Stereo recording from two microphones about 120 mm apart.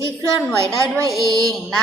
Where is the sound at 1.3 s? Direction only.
30° right (ahead or behind).